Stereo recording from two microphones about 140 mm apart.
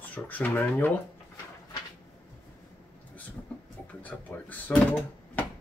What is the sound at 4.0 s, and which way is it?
Drawer open or close, 10° left (ahead or behind).